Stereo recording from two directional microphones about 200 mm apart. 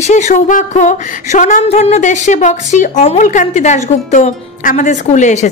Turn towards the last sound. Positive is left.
turn(degrees=35)  # may be behind; listen again after turning